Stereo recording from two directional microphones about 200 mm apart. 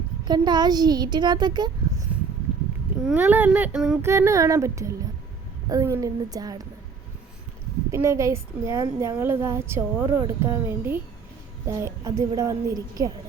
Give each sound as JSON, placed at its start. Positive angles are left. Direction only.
{"t": 0.3, "sound": "a child's voice", "side_deg": -20}
{"t": 3.1, "sound": "a woman's voice", "side_deg": -10}
{"t": 4.1, "sound": "a woman's voice", "side_deg": -15}
{"t": 7.9, "sound": "a woman's voice", "side_deg": -15}